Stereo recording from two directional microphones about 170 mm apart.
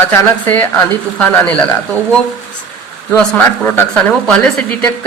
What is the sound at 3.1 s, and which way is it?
A man's voice, 10° left (ahead or behind).